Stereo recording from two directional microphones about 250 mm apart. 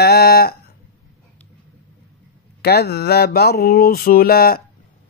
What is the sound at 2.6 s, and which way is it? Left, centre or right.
Speech, left.